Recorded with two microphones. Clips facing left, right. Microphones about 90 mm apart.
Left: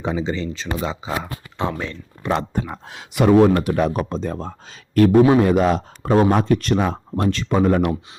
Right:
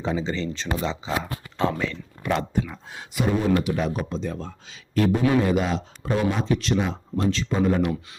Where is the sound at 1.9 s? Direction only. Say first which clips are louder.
Left 3 dB; 30° left (ahead or behind).